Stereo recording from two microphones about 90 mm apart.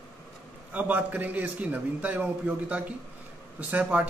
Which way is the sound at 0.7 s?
20° right (ahead or behind).